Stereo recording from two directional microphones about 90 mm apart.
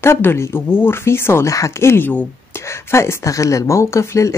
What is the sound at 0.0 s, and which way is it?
Speech, 25° left (ahead or behind).